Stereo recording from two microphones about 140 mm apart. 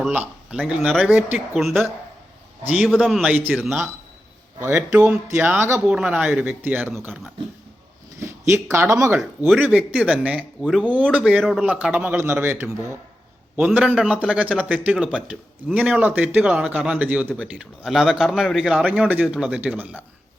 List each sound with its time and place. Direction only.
0.5 s speech: centre (ahead or behind)
2.7 s speech: centre (ahead or behind)
4.9 s a man's voice: 10° right (ahead or behind)
5.9 s a man's voice: 5° right (ahead or behind)
8.2 s a man's voice: 20° right (ahead or behind)
17.2 s a man's voice: 5° left (ahead or behind); by 20.1 s 10° right (ahead or behind)